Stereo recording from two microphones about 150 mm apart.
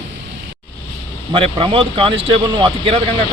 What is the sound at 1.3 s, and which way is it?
A man's voice, 35° right (ahead or behind).